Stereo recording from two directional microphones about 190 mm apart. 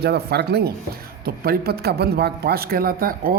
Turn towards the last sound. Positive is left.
turn(degrees=-50)  # may be behind; listen again after turning